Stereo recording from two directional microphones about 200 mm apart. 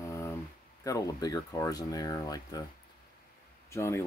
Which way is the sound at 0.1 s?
15° left (ahead or behind).